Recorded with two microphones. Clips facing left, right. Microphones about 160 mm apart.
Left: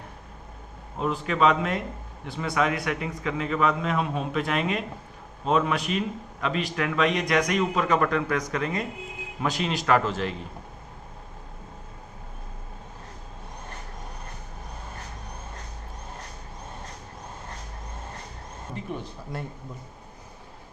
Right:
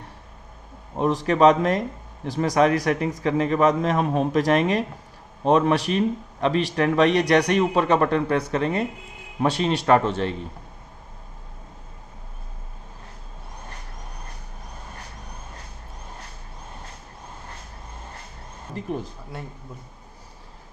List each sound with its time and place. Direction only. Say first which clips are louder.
1.3 s a man's voice: right 6 dB; 40° right (ahead or behind)
19.3 s speech: left 1 dB; centre (ahead or behind)